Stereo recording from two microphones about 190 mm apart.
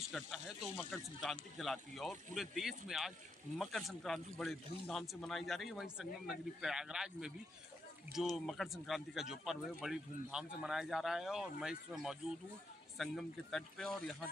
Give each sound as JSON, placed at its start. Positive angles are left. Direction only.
{"t": 0.1, "sound": "speech", "side_deg": -5}